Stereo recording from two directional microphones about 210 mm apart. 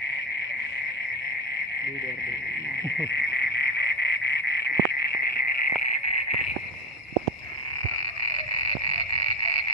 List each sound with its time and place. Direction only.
3.1 s frog: 55° left (ahead or behind)
8.6 s frog: 30° left (ahead or behind)